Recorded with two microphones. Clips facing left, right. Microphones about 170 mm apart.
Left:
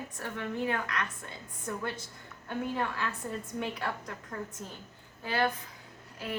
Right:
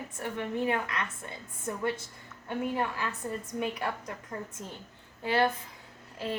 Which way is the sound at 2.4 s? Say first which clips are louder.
Right 2 dB; 15° right (ahead or behind).